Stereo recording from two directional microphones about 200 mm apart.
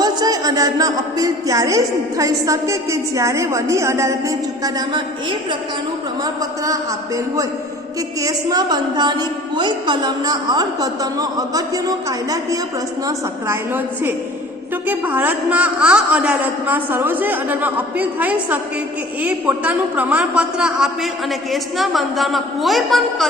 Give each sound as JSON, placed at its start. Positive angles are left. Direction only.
{"t": 0.0, "sound": "speech", "side_deg": -20}
{"t": 8.2, "sound": "a woman's voice", "side_deg": -20}